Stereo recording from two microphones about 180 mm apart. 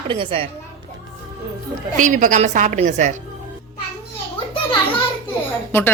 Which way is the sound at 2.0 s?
45° right (ahead or behind).